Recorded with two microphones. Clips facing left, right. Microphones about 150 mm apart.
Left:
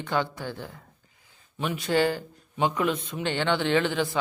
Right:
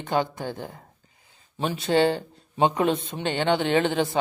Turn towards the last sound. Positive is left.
turn(degrees=-20)  # may be behind; listen again after turning